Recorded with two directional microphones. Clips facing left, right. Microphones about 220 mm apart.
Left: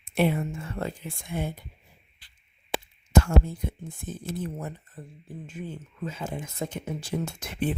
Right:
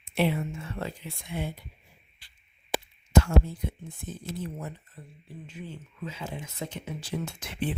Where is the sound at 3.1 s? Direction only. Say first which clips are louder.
Left 1 dB; 50° left (ahead or behind).